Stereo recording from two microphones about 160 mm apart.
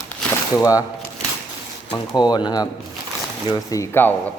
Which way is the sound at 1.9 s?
25° left (ahead or behind).